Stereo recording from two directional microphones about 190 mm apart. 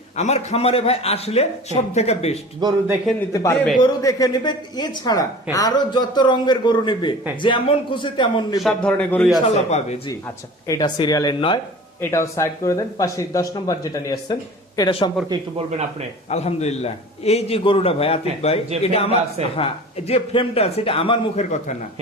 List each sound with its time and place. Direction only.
0.2 s a man's voice: 35° left (ahead or behind)
2.6 s a man's voice: 20° right (ahead or behind)
3.3 s a woman's voice: 15° left (ahead or behind)
8.6 s speech: 5° left (ahead or behind)
10.7 s a woman's voice: 25° left (ahead or behind)
11.9 s a woman's voice: 15° left (ahead or behind)
15.3 s speech: 30° right (ahead or behind)
16.3 s a man's voice: 35° left (ahead or behind)